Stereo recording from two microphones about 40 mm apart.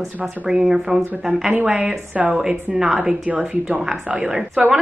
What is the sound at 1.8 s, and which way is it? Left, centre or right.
Speech, right.